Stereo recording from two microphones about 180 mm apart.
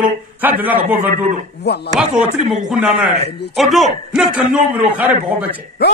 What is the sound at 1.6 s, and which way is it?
Speech, 65° left (ahead or behind).